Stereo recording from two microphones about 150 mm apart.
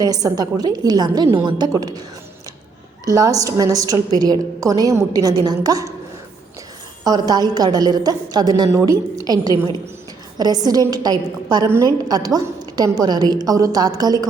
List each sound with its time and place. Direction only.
0.0 s a woman's voice: 25° right (ahead or behind)
3.1 s a woman's voice: 25° right (ahead or behind)
7.0 s a woman's voice: 25° right (ahead or behind)